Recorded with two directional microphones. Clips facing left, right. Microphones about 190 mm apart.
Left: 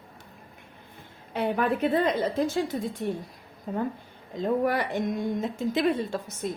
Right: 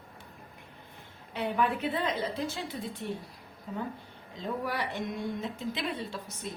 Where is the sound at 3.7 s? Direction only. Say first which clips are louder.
Left 7 dB; 55° left (ahead or behind).